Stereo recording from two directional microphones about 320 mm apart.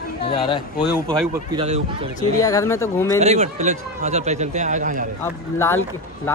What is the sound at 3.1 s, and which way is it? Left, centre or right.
Speech, centre.